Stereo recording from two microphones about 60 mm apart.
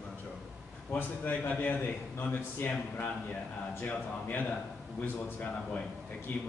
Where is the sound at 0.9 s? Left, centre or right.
Left.